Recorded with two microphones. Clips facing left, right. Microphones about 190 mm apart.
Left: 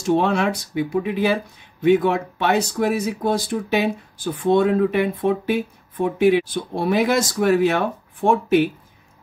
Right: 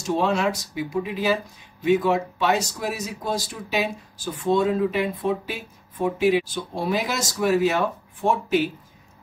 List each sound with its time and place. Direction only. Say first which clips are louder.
0.0 s speech: left 3 dB; 55° left (ahead or behind)